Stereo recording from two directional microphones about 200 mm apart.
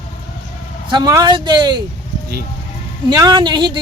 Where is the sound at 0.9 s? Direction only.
20° right (ahead or behind).